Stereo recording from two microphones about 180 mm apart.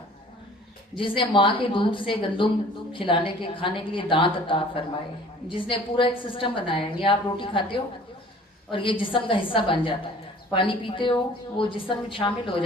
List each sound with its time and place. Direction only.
0.9 s a woman's voice: 30° left (ahead or behind)